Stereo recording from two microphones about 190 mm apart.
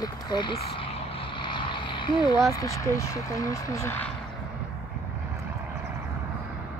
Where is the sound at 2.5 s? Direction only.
15° left (ahead or behind).